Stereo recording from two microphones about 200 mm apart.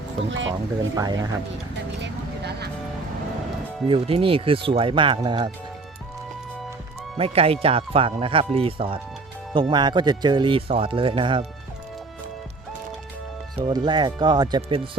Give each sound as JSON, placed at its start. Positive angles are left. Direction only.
{"t": 0.3, "sound": "speech", "side_deg": -70}
{"t": 0.9, "sound": "speech", "side_deg": -20}
{"t": 2.0, "sound": "vehicle", "side_deg": -55}
{"t": 3.8, "sound": "speech", "side_deg": -30}
{"t": 7.2, "sound": "speech", "side_deg": -30}
{"t": 13.6, "sound": "speech", "side_deg": -25}